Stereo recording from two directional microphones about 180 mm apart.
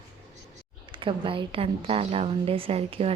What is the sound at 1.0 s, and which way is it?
A woman's voice, 30° right (ahead or behind).